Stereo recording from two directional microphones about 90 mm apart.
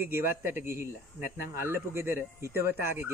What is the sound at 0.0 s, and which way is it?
Speech, 25° right (ahead or behind).